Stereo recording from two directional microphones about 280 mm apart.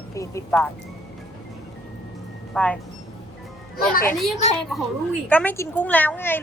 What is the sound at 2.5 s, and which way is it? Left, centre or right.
Speech, centre.